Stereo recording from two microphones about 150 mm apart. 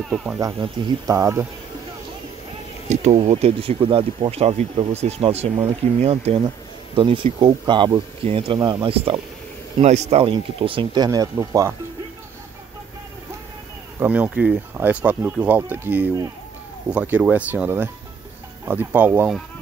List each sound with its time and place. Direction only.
0.1 s speech: 5° right (ahead or behind)
0.4 s speech: 20° right (ahead or behind)
2.9 s speech: 45° right (ahead or behind)
11.1 s speech: 20° right (ahead or behind)
13.9 s speech: 10° right (ahead or behind)